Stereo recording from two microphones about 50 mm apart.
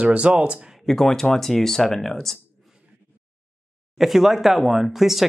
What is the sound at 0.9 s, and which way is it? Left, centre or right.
Speech, centre.